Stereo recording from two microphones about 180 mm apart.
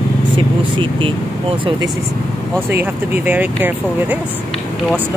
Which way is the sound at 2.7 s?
10° right (ahead or behind).